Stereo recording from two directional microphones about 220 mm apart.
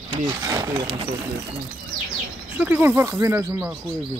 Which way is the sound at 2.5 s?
5° right (ahead or behind).